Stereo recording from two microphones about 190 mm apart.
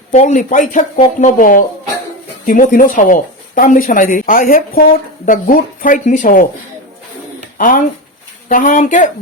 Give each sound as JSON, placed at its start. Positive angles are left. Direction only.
{"t": 0.1, "sound": "speech", "side_deg": 40}
{"t": 7.6, "sound": "speech", "side_deg": 45}